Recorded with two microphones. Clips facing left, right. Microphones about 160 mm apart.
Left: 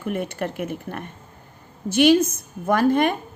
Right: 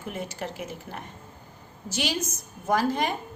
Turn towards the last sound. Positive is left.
turn(degrees=60)  # may be behind; listen again after turning